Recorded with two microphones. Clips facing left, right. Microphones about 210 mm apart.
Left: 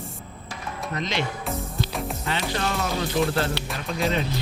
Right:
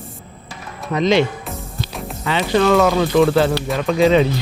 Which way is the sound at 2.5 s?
90° right.